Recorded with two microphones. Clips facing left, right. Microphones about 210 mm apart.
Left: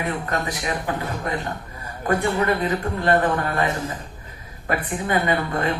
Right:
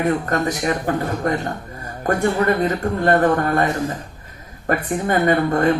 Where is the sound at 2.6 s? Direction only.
45° right (ahead or behind).